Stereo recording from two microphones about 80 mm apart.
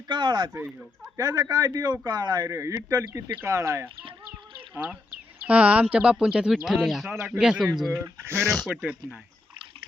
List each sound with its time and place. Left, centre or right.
0.1 s speech: right
1.1 s speech: right
2.5 s speech: right
5.5 s speech: centre
6.7 s speech: centre
8.0 s speech: right
8.4 s speech: centre
8.7 s speech: centre